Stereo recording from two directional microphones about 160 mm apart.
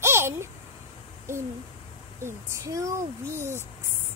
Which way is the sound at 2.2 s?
20° right (ahead or behind).